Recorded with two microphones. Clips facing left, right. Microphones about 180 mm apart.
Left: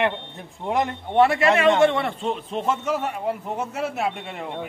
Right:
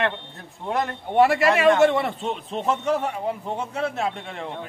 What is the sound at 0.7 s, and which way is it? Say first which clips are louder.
Speech: left 2 dB; 20° left (ahead or behind).